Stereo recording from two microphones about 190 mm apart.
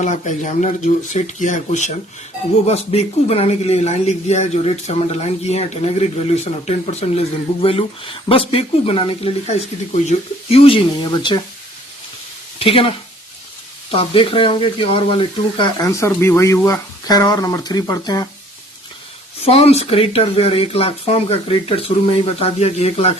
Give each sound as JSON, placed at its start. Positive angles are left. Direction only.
{"t": 0.0, "sound": "speech", "side_deg": 40}
{"t": 12.5, "sound": "speech", "side_deg": 30}
{"t": 13.9, "sound": "speech", "side_deg": 30}
{"t": 19.5, "sound": "speech", "side_deg": 30}